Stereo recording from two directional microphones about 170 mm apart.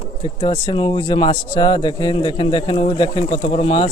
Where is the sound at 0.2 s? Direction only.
30° left (ahead or behind).